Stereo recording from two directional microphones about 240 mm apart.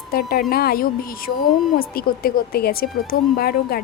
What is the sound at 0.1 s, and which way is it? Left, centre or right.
A woman's voice, left.